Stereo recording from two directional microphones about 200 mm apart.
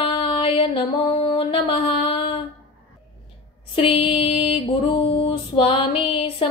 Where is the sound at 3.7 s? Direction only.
30° left (ahead or behind).